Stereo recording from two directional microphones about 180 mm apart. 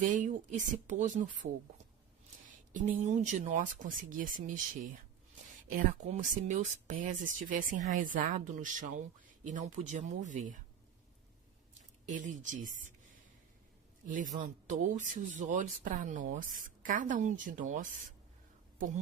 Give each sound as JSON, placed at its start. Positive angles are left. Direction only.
{"t": 0.0, "sound": "speech", "side_deg": -45}
{"t": 2.5, "sound": "speech", "side_deg": -45}
{"t": 12.0, "sound": "speech", "side_deg": -45}
{"t": 14.3, "sound": "speech", "side_deg": -45}